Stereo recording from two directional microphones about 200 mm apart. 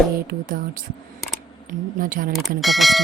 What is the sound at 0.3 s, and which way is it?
Speech, 45° right (ahead or behind).